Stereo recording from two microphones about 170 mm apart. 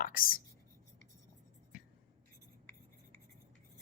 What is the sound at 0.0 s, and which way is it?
Speech, 55° left (ahead or behind).